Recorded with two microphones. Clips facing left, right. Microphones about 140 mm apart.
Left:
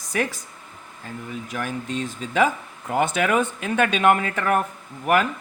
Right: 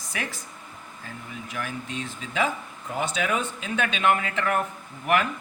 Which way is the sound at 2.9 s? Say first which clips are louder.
Left 6 dB; 60° left (ahead or behind).